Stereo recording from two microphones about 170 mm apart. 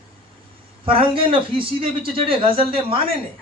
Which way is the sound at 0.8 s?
30° right (ahead or behind).